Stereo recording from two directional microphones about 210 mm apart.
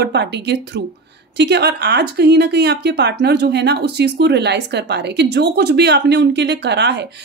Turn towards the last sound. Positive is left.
turn(degrees=-55)  # may be behind; listen again after turning